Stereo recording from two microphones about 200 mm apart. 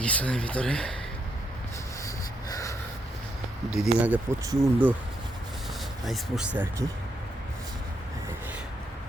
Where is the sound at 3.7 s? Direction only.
5° right (ahead or behind).